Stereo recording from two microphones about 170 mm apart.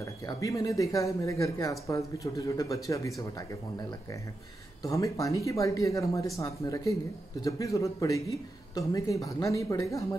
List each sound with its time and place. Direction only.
0.0 s speech: 20° left (ahead or behind)
4.8 s speech: 20° left (ahead or behind)